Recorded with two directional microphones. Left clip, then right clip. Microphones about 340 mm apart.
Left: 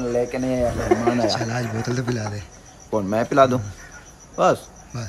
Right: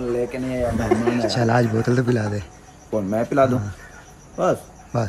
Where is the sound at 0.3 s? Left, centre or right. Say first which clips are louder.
Left 2 dB; left.